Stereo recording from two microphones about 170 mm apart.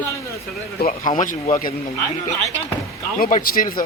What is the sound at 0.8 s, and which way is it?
Speech, 50° left (ahead or behind).